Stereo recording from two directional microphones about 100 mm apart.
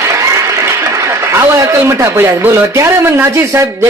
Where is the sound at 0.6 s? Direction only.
30° right (ahead or behind).